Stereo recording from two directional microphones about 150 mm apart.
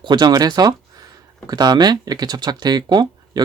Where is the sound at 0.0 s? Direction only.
30° right (ahead or behind).